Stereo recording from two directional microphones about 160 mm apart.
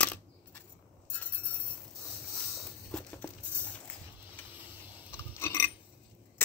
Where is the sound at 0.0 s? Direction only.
10° left (ahead or behind).